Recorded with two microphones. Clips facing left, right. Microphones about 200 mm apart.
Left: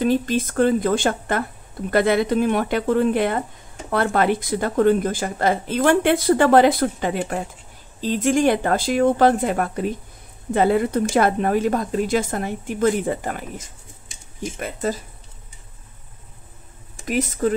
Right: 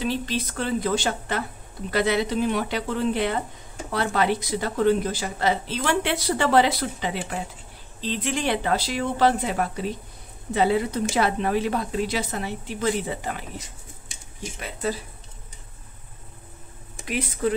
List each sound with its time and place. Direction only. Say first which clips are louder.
0.0 s a woman's voice: left 7 dB; 50° left (ahead or behind)
17.0 s a woman's voice: left 4 dB; 45° left (ahead or behind)